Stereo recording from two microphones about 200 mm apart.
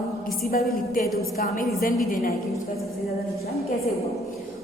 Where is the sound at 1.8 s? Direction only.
45° left (ahead or behind).